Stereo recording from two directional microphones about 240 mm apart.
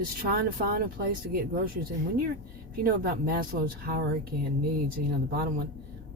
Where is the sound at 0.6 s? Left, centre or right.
Right.